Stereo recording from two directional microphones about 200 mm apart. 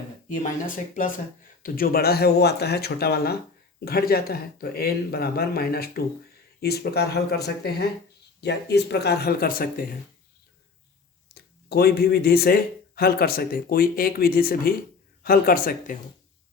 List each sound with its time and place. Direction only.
0.3 s speech: 40° left (ahead or behind)
11.7 s speech: 50° left (ahead or behind)